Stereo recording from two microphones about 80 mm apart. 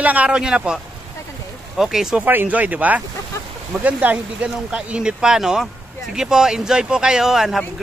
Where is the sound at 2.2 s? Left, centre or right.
Right; by 7.6 s centre.